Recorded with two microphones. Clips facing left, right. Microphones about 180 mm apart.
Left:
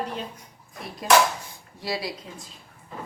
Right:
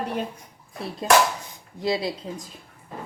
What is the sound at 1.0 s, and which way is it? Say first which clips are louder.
Speech: even; 25° right (ahead or behind).